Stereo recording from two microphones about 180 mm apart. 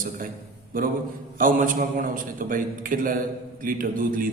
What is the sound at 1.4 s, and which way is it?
A man's voice, 50° right (ahead or behind).